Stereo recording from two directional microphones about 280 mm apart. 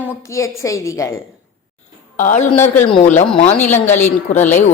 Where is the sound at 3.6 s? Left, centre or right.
Centre.